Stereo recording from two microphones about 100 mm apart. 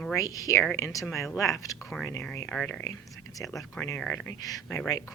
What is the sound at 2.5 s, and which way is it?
Speech, 10° left (ahead or behind).